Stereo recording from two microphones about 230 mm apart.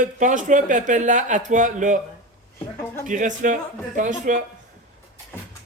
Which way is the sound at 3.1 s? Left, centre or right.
Right.